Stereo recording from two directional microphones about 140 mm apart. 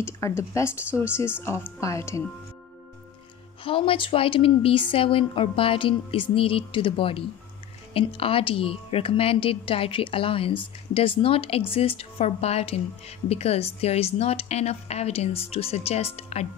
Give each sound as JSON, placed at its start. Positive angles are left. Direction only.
{"t": 0.4, "sound": "speech", "side_deg": 20}
{"t": 3.6, "sound": "a woman's voice", "side_deg": 40}